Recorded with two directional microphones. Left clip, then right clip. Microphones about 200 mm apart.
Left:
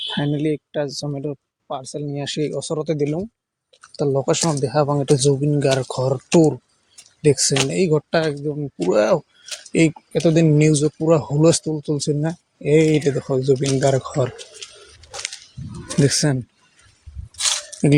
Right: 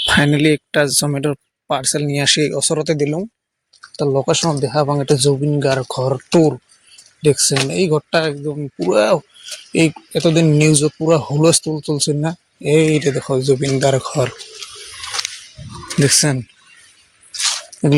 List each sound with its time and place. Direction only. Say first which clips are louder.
0.1 s speech: right 10 dB; 25° right (ahead or behind)
2.2 s speech: right 9 dB; 15° right (ahead or behind)
15.9 s speech: right 4 dB; centre (ahead or behind)